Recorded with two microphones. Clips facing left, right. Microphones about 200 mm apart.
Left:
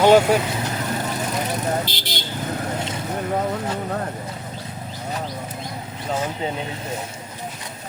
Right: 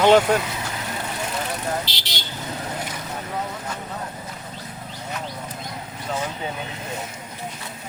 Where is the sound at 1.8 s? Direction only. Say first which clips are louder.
Left 5 dB; 50° left (ahead or behind).